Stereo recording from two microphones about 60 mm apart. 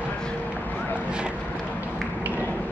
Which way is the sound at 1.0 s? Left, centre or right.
Centre.